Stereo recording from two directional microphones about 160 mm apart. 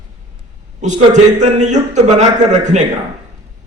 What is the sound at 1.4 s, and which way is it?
A man's voice, 50° right (ahead or behind).